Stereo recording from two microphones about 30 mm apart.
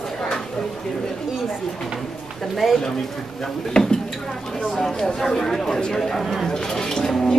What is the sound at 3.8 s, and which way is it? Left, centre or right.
Speech, left.